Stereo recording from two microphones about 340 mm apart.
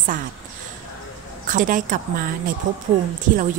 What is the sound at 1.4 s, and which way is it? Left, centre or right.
A woman's voice, right.